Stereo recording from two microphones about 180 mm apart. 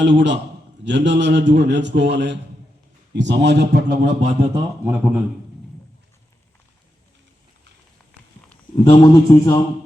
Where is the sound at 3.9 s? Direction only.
40° right (ahead or behind).